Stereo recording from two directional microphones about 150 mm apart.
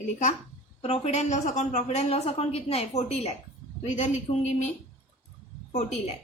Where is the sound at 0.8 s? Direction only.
45° left (ahead or behind).